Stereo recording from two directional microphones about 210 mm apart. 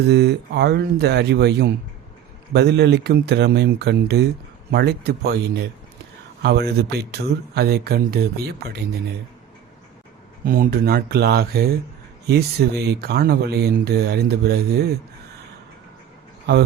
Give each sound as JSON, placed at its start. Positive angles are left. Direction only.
{"t": 0.0, "sound": "speech", "side_deg": -50}
{"t": 10.4, "sound": "speech", "side_deg": -45}